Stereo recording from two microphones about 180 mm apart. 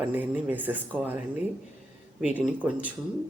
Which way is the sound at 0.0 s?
10° right (ahead or behind).